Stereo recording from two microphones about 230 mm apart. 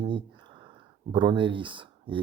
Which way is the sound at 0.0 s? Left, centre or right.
Right.